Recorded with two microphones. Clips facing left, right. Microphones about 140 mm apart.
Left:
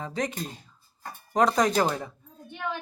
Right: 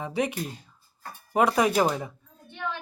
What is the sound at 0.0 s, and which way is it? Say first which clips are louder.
Speech: right 3 dB; 10° right (ahead or behind).